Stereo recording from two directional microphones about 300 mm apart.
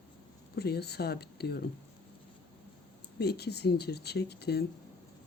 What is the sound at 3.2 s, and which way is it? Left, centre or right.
Speech, left.